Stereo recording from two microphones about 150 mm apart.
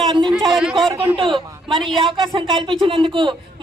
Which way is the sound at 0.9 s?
15° right (ahead or behind).